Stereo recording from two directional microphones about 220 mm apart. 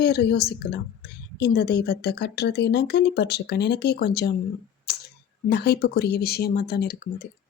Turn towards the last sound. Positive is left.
turn(degrees=45)  # may be behind; listen again after turning